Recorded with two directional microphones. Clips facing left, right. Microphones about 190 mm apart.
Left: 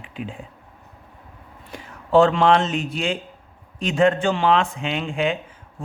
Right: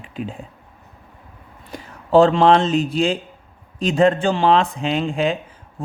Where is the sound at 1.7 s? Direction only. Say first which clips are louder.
Right 3 dB; 35° right (ahead or behind).